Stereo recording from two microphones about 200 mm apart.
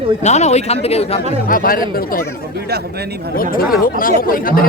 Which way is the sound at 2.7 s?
55° right (ahead or behind).